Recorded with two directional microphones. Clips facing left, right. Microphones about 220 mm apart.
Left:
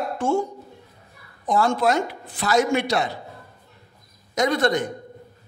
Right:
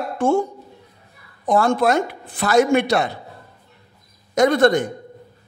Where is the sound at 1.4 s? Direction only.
55° right (ahead or behind).